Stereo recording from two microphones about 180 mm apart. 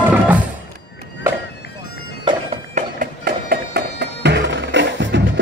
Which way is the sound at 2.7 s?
55° right (ahead or behind).